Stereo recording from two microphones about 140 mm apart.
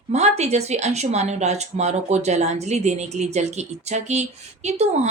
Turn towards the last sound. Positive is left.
turn(degrees=-55)  # may be behind; listen again after turning